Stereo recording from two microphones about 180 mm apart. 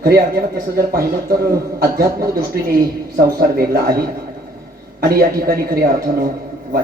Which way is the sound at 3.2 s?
55° right (ahead or behind).